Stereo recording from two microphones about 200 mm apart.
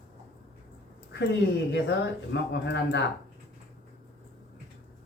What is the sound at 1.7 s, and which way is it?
Speech, 60° left (ahead or behind).